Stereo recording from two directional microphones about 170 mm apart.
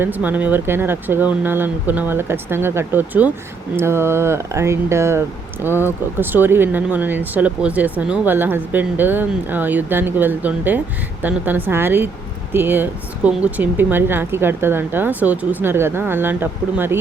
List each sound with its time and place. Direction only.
0.0 s speech: 10° right (ahead or behind)